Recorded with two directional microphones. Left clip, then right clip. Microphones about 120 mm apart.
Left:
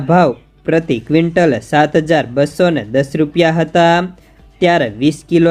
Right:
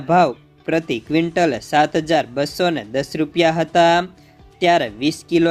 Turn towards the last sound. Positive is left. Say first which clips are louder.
# left 5 dB
turn(degrees=-25)  # may be behind; listen again after turning